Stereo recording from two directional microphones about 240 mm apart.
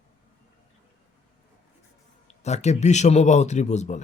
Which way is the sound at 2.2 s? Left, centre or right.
Left.